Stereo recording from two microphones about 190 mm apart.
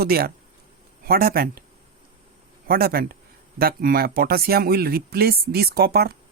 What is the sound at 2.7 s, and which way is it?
Speech, 50° right (ahead or behind).